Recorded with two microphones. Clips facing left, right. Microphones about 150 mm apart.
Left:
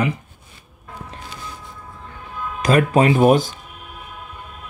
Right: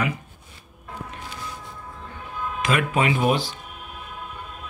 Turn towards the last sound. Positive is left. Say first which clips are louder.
# left 7 dB
turn(degrees=45)  # may be behind; listen again after turning